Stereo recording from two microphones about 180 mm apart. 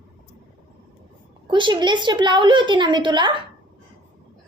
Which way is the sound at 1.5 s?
25° right (ahead or behind).